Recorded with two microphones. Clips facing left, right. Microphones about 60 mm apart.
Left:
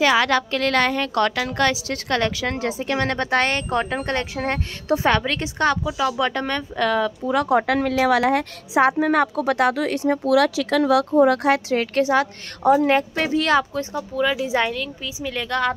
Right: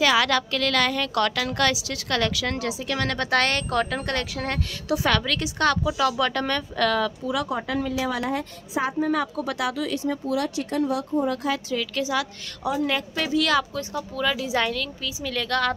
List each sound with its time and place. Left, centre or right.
0.0 s speech: left
5.9 s speech: centre
7.4 s a woman's voice: left
10.2 s speech: left
11.8 s a woman's voice: left
13.9 s speech: centre